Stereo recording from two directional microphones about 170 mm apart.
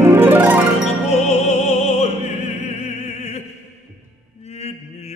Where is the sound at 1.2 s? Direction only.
40° left (ahead or behind).